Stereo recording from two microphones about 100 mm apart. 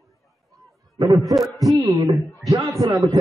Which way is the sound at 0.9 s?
40° right (ahead or behind).